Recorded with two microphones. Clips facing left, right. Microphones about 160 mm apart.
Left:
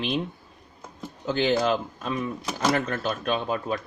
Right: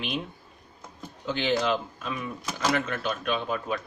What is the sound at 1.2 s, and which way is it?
Speech, 45° left (ahead or behind).